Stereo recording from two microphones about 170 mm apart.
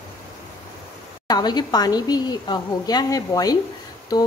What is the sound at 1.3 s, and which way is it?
A woman's voice, 25° left (ahead or behind).